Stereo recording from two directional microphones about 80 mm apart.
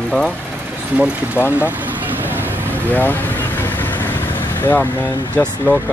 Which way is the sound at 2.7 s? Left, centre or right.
Left.